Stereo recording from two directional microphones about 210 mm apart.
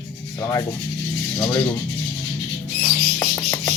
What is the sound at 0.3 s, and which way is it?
Speech, 15° left (ahead or behind).